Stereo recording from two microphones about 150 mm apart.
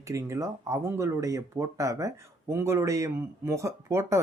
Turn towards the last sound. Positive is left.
turn(degrees=-20)  # may be behind; listen again after turning